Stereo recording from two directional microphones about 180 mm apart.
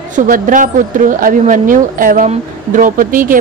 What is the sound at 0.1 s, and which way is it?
Speech, 45° right (ahead or behind).